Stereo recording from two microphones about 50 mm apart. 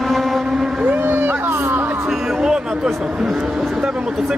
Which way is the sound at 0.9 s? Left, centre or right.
Right.